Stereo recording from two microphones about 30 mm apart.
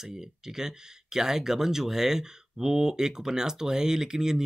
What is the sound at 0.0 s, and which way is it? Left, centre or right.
Speech, centre.